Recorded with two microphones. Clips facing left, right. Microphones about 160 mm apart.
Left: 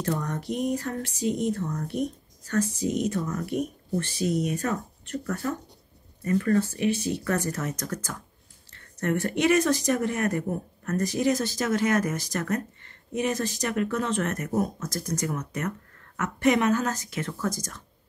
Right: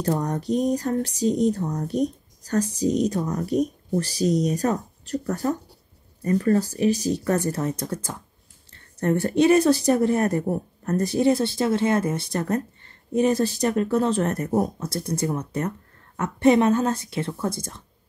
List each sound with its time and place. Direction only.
0.0 s speech: 35° right (ahead or behind)